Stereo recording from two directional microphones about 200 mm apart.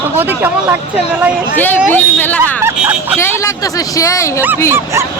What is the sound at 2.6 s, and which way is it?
Vehicle, 10° right (ahead or behind).